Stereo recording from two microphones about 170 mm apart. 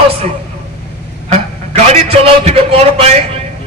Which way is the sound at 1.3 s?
40° right (ahead or behind).